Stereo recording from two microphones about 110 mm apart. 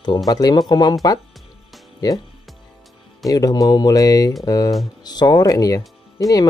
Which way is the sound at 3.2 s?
35° left (ahead or behind).